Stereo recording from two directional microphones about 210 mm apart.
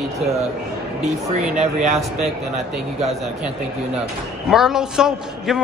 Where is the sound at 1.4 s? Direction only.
35° right (ahead or behind).